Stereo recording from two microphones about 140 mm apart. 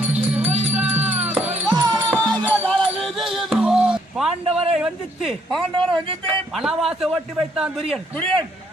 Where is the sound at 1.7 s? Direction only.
25° right (ahead or behind).